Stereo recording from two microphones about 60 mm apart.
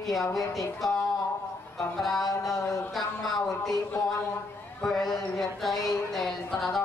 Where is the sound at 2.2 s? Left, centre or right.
Left.